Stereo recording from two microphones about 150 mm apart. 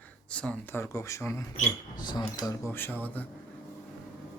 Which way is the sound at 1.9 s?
30° left (ahead or behind).